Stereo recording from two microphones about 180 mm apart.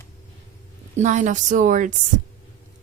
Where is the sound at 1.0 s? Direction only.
45° right (ahead or behind).